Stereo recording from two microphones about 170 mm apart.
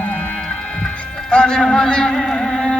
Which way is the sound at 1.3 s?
5° left (ahead or behind).